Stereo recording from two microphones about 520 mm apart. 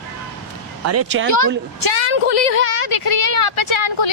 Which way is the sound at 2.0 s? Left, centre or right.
Left.